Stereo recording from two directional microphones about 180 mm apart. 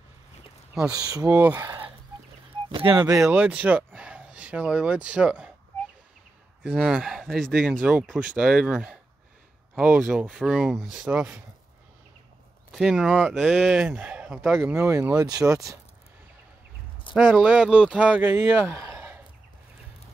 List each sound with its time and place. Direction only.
0.9 s speech: 20° right (ahead or behind)
1.3 s speech: 10° right (ahead or behind)
2.7 s speech: 25° right (ahead or behind)
3.1 s speech: 5° right (ahead or behind)
6.7 s speech: 5° right (ahead or behind)
12.7 s speech: 5° right (ahead or behind)
14.6 s speech: 15° right (ahead or behind)
17.1 s speech: 5° right (ahead or behind)